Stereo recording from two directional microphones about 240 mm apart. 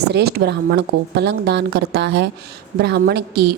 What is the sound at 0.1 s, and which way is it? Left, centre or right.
A woman's voice, right.